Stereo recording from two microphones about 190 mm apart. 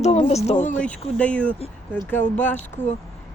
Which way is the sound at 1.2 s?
5° left (ahead or behind).